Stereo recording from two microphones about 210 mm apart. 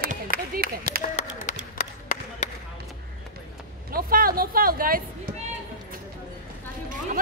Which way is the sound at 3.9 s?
45° right (ahead or behind).